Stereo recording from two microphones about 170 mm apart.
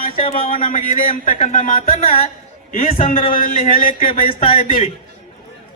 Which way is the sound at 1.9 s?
35° left (ahead or behind).